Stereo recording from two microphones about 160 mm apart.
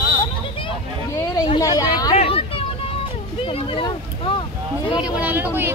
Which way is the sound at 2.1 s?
35° left (ahead or behind).